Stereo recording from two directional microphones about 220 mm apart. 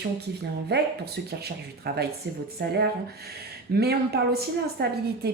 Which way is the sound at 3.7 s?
45° right (ahead or behind).